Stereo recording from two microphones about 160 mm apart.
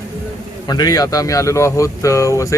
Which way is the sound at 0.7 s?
25° left (ahead or behind).